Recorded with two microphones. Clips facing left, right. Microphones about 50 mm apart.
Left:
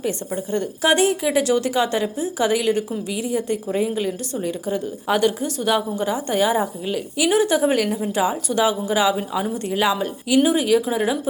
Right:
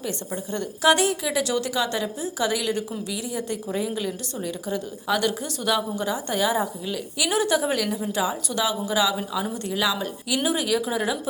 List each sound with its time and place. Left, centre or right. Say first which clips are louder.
0.5 s a woman's voice: left 1 dB; centre
7.2 s a woman's voice: left 4 dB; centre
7.6 s a woman's voice: left 5 dB; left